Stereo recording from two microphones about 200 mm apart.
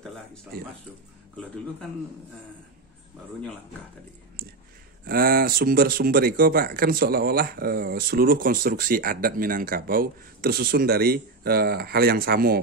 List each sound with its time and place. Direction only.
5.0 s speech: 50° right (ahead or behind)